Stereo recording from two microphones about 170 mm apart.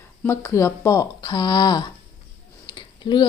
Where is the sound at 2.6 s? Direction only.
25° left (ahead or behind).